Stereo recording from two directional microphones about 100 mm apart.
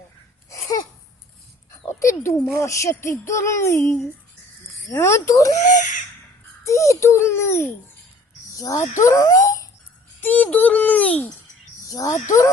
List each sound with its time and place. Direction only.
0.5 s babbling: 35° left (ahead or behind)
1.9 s dog: 30° left (ahead or behind)
2.2 s speech: 30° left (ahead or behind)
6.7 s speech: 30° left (ahead or behind)
8.5 s speech: 35° left (ahead or behind)
10.2 s speech: 15° left (ahead or behind)
11.9 s speech: 30° left (ahead or behind)